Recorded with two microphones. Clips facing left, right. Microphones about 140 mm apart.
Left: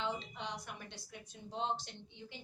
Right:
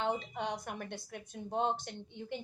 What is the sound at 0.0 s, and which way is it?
A woman's voice, 50° right (ahead or behind).